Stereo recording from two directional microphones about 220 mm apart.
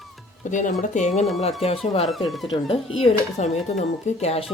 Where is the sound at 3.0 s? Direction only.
30° left (ahead or behind).